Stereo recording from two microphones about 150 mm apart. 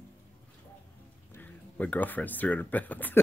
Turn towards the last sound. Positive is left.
turn(degrees=10)  # may be behind; listen again after turning